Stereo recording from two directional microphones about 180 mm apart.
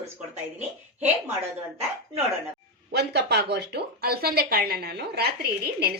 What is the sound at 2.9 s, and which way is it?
Speech, 65° right (ahead or behind).